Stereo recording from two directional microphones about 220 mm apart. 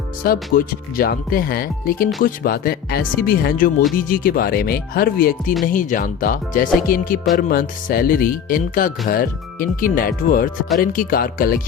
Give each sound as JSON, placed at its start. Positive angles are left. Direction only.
{"t": 0.3, "sound": "speech", "side_deg": 40}